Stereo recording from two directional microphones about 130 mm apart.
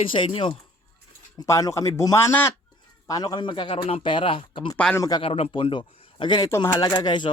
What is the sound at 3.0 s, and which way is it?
Speech, 30° left (ahead or behind).